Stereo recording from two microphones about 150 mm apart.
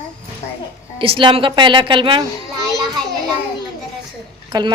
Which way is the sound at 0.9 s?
35° right (ahead or behind).